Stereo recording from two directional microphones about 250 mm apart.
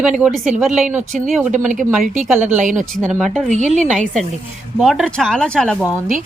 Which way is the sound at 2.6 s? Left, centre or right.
Right.